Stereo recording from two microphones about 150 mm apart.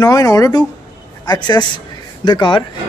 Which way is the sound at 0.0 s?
25° left (ahead or behind).